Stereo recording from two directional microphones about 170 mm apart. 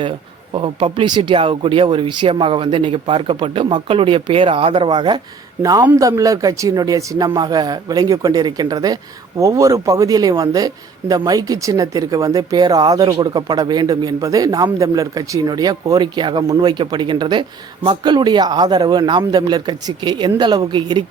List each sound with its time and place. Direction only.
0.5 s speech: 30° right (ahead or behind)
5.8 s speech: 15° right (ahead or behind)